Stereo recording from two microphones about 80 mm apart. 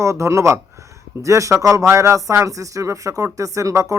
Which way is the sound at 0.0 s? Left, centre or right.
Right.